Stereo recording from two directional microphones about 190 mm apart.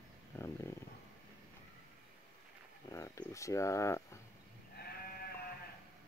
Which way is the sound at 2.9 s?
15° left (ahead or behind).